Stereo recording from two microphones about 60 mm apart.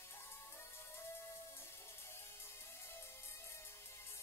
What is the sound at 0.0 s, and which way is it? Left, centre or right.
Music, left.